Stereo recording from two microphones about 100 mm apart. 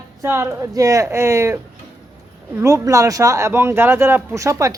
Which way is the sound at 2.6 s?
30° right (ahead or behind).